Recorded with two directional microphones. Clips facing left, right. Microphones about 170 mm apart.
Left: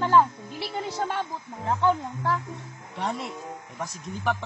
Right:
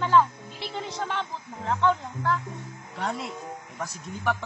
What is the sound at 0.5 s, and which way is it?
Music, 10° left (ahead or behind).